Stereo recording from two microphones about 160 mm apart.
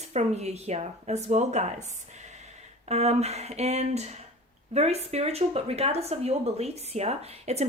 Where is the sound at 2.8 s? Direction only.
40° right (ahead or behind).